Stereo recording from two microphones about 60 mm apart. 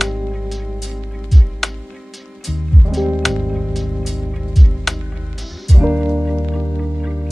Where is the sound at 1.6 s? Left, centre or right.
Centre.